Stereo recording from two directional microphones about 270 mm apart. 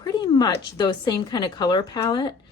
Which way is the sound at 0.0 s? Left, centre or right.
Centre.